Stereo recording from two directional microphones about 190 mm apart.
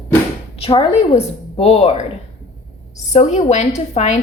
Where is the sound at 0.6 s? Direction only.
30° left (ahead or behind).